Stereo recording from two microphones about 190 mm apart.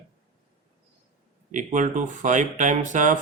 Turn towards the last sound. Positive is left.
turn(degrees=-40)  # may be behind; listen again after turning